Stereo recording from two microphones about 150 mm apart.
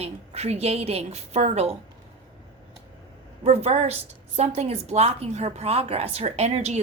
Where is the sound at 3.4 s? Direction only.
45° right (ahead or behind).